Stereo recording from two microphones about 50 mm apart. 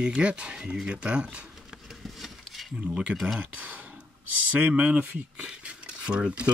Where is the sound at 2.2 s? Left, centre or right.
Centre.